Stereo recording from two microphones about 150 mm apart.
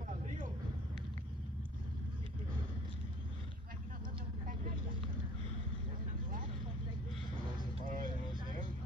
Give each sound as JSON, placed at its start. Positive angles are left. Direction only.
{"t": 7.8, "sound": "vehicle", "side_deg": -65}